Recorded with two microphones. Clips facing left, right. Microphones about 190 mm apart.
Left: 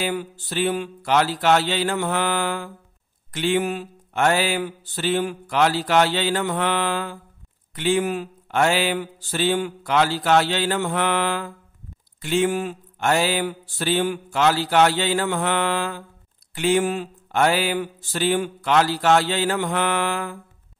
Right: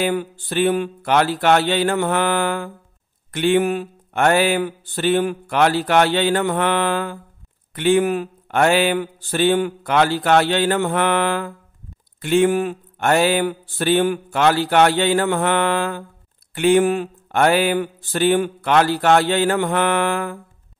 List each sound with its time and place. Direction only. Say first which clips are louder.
0.0 s speech: right 5 dB; 55° right (ahead or behind)